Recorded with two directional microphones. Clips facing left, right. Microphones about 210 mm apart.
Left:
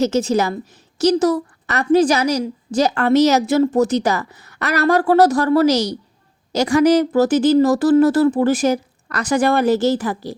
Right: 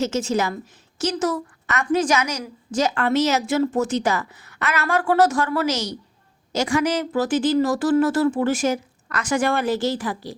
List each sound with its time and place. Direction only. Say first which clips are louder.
0.0 s a woman's voice: left 5 dB; 35° left (ahead or behind)